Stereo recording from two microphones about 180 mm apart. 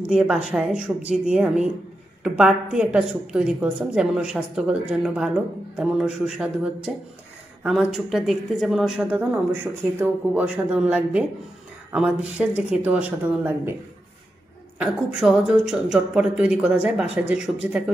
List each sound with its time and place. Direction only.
0.1 s a woman's voice: 5° right (ahead or behind)
14.8 s a woman's voice: 5° right (ahead or behind)